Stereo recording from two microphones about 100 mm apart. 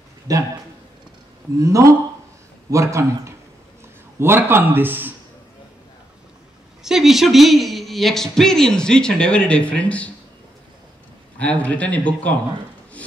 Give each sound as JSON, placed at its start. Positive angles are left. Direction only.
{"t": 0.3, "sound": "a man's voice", "side_deg": -35}
{"t": 1.6, "sound": "a man's voice", "side_deg": -35}
{"t": 6.8, "sound": "speech", "side_deg": -5}
{"t": 11.3, "sound": "a man's voice", "side_deg": 15}